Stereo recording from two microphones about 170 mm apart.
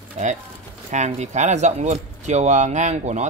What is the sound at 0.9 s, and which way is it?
Speech, 45° right (ahead or behind).